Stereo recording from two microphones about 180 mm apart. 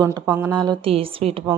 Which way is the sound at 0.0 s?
20° right (ahead or behind).